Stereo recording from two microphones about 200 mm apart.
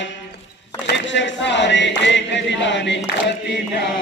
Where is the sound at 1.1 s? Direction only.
65° left (ahead or behind).